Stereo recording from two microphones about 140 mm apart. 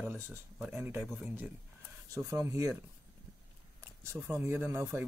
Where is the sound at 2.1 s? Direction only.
25° right (ahead or behind).